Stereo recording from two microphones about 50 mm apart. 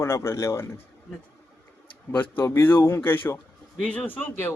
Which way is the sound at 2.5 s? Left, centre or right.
Left.